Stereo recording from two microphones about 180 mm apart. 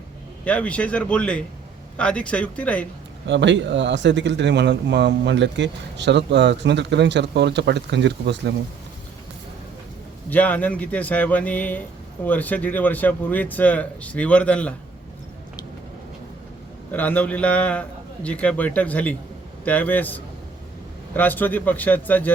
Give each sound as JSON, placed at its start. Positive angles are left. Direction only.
{"t": 0.4, "sound": "speech", "side_deg": 10}
{"t": 3.2, "sound": "speech", "side_deg": -85}
{"t": 10.2, "sound": "speech", "side_deg": 10}
{"t": 16.9, "sound": "speech", "side_deg": 10}